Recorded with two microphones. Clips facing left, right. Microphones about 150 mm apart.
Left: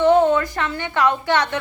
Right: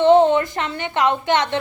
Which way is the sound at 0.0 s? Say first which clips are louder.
Right 2 dB; 25° right (ahead or behind).